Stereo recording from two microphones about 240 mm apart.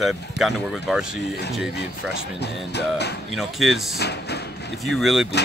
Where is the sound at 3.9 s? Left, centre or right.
Left.